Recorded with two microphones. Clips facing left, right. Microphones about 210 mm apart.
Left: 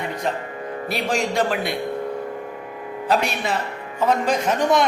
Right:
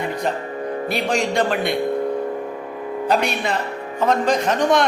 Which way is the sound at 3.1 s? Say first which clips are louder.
Right 1 dB; centre (ahead or behind).